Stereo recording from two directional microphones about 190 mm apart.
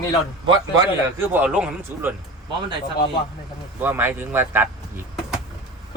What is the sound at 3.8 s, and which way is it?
Speech, 10° right (ahead or behind).